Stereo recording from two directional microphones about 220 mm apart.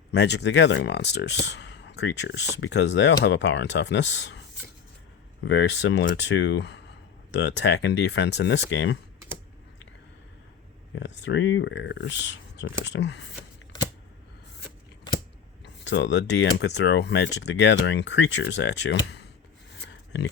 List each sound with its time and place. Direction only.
0.1 s speech: 50° left (ahead or behind)
5.5 s speech: 55° left (ahead or behind)
10.9 s speech: 55° left (ahead or behind)
15.6 s speech: 55° left (ahead or behind)
19.9 s oink: 55° left (ahead or behind)